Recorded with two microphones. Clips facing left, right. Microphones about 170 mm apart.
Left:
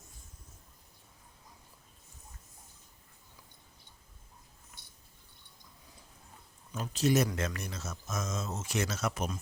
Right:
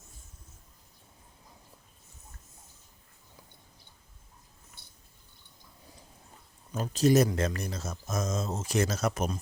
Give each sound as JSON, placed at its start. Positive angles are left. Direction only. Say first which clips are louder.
{"t": 6.7, "sound": "speech", "louder": "right 5 dB", "side_deg": -40}